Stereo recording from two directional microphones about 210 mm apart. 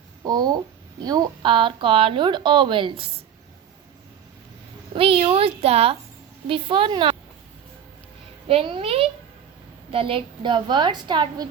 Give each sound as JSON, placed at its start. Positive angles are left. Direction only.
{"t": 0.2, "sound": "speech", "side_deg": -15}
{"t": 4.9, "sound": "speech", "side_deg": -25}
{"t": 8.4, "sound": "a child's voice", "side_deg": -25}